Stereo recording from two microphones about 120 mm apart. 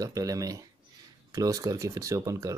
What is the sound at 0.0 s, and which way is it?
Speech, 30° right (ahead or behind).